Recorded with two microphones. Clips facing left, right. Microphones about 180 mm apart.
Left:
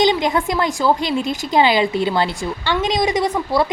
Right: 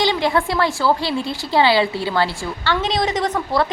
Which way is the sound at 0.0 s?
20° left (ahead or behind).